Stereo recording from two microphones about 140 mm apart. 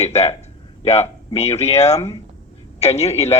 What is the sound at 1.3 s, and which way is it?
A man's voice, 50° left (ahead or behind).